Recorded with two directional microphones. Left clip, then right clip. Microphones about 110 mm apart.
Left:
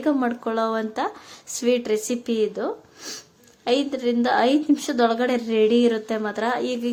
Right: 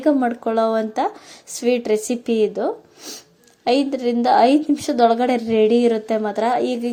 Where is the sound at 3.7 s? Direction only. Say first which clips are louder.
Right 3 dB; 30° right (ahead or behind).